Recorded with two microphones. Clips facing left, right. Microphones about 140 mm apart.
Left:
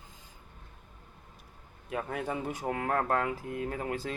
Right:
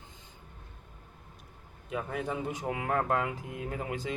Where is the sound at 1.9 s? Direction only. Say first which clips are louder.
Even; centre (ahead or behind).